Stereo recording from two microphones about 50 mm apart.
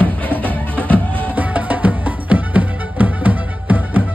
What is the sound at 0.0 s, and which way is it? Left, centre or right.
Music, left.